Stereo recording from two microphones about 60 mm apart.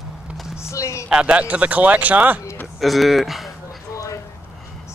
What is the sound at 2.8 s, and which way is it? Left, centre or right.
Speech, centre.